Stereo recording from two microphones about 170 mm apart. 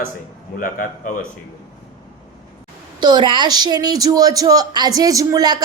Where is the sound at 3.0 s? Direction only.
25° right (ahead or behind).